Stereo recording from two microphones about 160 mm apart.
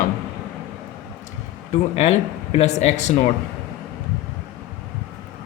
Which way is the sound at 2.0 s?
40° left (ahead or behind).